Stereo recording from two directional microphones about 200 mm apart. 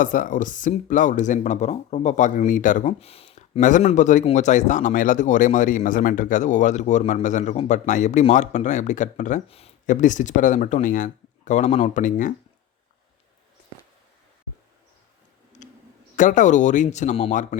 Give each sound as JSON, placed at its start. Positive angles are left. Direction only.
{"t": 0.0, "sound": "speech", "side_deg": 40}
{"t": 15.6, "sound": "a sound", "side_deg": 40}
{"t": 16.1, "sound": "speech", "side_deg": 40}